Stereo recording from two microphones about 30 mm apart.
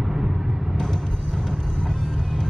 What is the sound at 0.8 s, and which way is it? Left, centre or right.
Music, centre.